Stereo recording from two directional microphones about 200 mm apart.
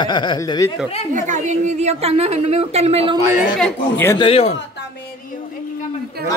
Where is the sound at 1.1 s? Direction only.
35° right (ahead or behind).